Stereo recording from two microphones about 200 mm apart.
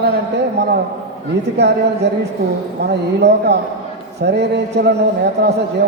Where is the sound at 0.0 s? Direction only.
55° right (ahead or behind).